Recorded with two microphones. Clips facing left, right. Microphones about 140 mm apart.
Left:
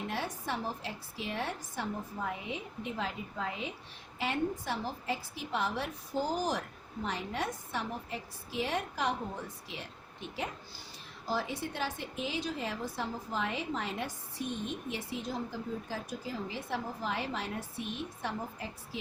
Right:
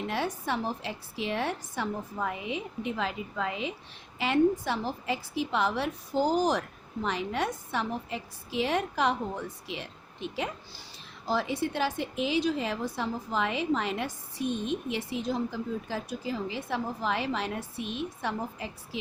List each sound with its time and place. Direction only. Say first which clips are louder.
0.1 s a woman's voice: right 5 dB; 90° right